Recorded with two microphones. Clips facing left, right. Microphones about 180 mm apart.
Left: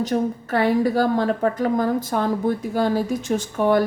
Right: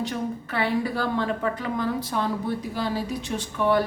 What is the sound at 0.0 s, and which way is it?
A woman's voice, 40° left (ahead or behind).